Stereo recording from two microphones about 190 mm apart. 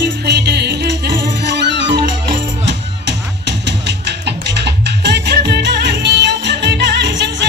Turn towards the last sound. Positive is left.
turn(degrees=-65)  # may be behind; listen again after turning